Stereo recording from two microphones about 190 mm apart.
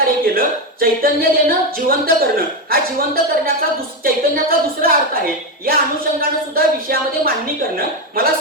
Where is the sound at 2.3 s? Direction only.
50° right (ahead or behind).